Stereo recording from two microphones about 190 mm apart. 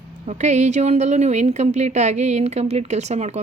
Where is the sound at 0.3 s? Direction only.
40° right (ahead or behind).